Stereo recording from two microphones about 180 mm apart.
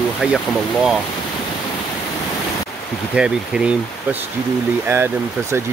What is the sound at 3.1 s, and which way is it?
Speech, 5° right (ahead or behind).